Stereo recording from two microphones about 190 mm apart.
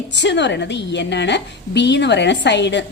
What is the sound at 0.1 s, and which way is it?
A woman's voice, 65° left (ahead or behind).